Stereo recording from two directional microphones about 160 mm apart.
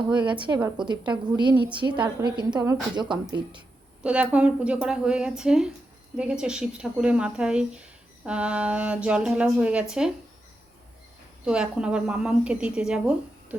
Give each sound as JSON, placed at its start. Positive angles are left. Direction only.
{"t": 0.1, "sound": "a woman's voice", "side_deg": -30}
{"t": 4.0, "sound": "a woman's voice", "side_deg": -5}
{"t": 11.4, "sound": "a woman's voice", "side_deg": -5}